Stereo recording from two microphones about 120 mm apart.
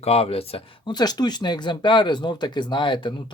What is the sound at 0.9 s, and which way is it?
Speech, 35° left (ahead or behind).